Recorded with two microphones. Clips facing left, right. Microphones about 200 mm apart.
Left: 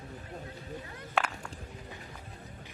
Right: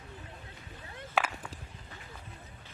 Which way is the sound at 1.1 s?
Centre (ahead or behind).